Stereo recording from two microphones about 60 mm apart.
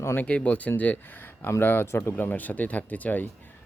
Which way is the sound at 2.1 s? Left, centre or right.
Left.